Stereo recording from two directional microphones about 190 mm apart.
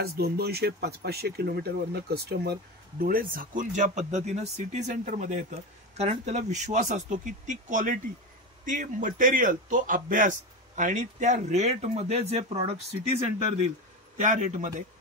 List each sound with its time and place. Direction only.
0.0 s a man's voice: 55° right (ahead or behind); by 12.8 s 35° right (ahead or behind)
14.2 s speech: 40° right (ahead or behind)